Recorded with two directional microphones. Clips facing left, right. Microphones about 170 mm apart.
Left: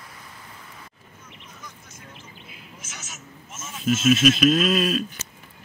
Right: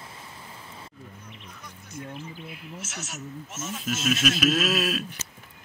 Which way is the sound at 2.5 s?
65° right (ahead or behind).